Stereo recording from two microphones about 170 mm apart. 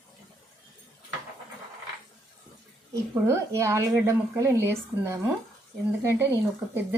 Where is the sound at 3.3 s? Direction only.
15° right (ahead or behind).